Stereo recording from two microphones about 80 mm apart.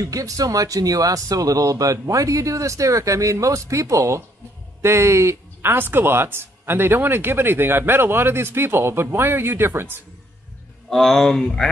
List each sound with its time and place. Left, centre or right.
0.0 s speech: right
10.9 s speech: centre